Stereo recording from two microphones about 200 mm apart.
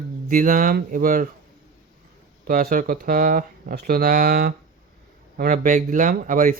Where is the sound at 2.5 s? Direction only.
45° right (ahead or behind).